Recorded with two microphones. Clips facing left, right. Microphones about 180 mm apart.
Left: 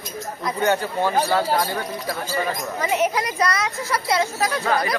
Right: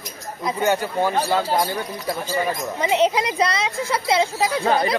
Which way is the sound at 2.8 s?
20° right (ahead or behind).